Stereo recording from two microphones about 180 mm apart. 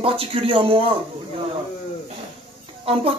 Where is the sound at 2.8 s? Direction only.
30° right (ahead or behind).